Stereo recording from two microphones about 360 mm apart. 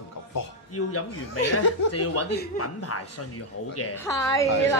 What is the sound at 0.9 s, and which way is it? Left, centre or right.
Speech, left.